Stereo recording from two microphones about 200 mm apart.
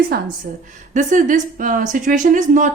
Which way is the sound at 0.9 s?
40° right (ahead or behind).